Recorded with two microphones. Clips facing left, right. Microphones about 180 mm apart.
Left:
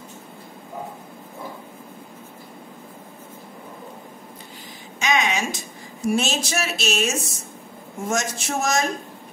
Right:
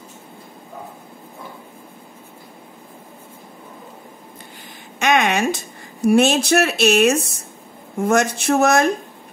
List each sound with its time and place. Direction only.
4.9 s a woman's voice: 60° right (ahead or behind)